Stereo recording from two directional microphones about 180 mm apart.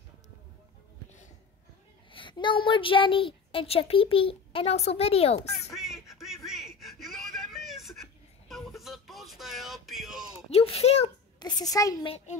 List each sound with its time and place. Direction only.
2.1 s a woman's voice: 25° left (ahead or behind)
5.5 s quack: centre (ahead or behind)
10.5 s a woman's voice: 35° left (ahead or behind)
11.3 s a woman's voice: 20° left (ahead or behind)